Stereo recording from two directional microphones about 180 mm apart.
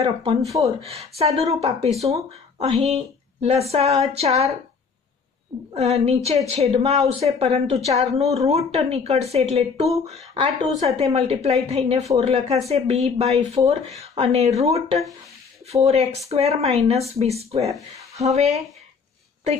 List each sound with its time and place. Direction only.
0.0 s a woman's voice: 35° right (ahead or behind)
5.8 s a woman's voice: 35° right (ahead or behind)